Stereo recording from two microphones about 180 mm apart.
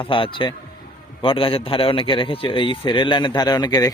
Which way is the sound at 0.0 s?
30° left (ahead or behind).